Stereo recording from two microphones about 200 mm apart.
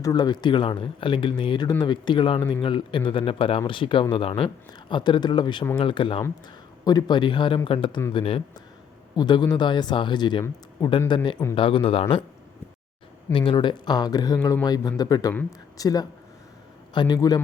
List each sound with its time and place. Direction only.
0.0 s speech: 20° left (ahead or behind)
13.3 s speech: 25° left (ahead or behind)